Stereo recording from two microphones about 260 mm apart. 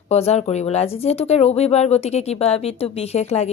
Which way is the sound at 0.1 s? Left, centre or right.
Left.